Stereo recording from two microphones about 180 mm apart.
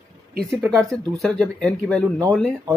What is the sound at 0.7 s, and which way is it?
Speech, 20° right (ahead or behind).